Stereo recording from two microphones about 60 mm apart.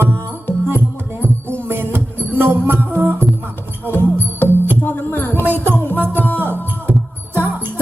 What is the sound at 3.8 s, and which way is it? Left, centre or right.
Music, left.